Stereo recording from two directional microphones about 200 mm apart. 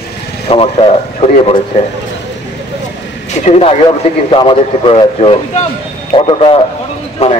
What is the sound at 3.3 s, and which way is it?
A man's voice, 30° left (ahead or behind).